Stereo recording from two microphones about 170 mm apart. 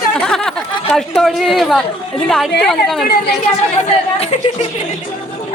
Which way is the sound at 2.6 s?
Centre (ahead or behind).